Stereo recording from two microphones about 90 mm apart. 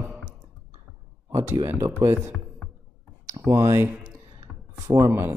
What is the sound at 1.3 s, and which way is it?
Speech, 30° right (ahead or behind).